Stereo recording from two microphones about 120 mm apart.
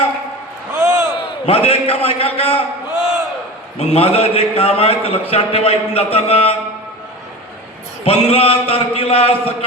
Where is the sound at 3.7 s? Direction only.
55° left (ahead or behind).